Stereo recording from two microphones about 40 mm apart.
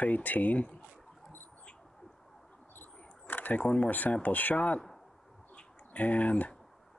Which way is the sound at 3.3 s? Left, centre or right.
Left.